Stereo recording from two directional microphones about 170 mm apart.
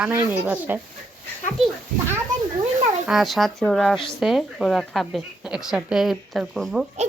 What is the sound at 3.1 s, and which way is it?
Speech, centre (ahead or behind).